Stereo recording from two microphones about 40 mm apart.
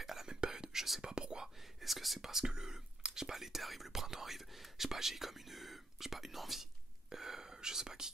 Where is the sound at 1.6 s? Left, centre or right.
Centre.